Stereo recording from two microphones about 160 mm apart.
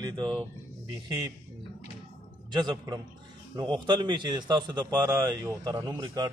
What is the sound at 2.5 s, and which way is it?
A man's voice, 25° right (ahead or behind).